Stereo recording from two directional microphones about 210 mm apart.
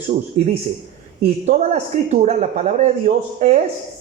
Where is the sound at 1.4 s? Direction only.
30° right (ahead or behind).